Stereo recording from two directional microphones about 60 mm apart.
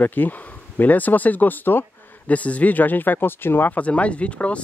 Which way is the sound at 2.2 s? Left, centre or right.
Left.